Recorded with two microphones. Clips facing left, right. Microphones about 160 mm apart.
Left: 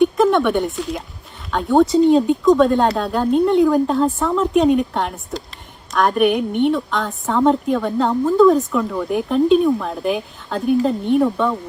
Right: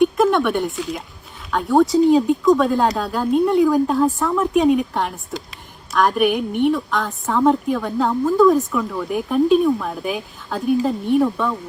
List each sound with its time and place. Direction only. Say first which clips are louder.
0.0 s a woman's voice: left 1 dB; centre (ahead or behind)